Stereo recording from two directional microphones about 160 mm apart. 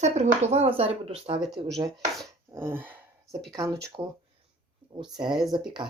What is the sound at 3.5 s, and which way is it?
Speech, 20° right (ahead or behind).